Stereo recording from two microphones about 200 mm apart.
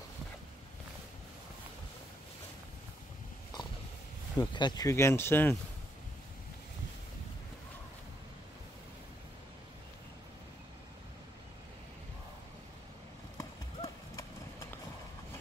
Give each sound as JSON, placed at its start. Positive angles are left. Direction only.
{"t": 4.4, "sound": "speech", "side_deg": 20}
{"t": 13.4, "sound": "clip-clop", "side_deg": 15}